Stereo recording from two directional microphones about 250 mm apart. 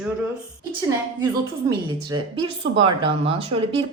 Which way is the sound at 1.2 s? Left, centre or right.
Centre.